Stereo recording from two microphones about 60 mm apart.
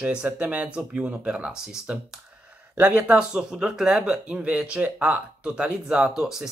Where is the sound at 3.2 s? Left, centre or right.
Centre.